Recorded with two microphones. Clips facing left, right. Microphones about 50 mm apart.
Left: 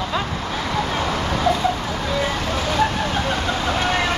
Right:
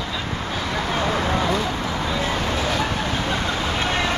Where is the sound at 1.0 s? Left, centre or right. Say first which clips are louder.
Right 1 dB; right.